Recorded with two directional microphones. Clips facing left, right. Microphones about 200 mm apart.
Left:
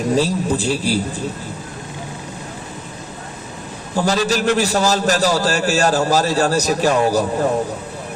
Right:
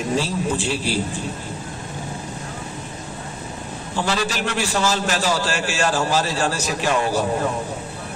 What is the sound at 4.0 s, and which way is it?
A man's voice, 40° left (ahead or behind).